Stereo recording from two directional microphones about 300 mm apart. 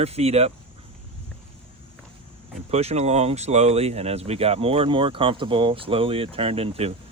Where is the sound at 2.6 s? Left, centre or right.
Right.